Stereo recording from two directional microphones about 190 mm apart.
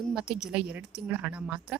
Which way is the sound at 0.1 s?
5° right (ahead or behind).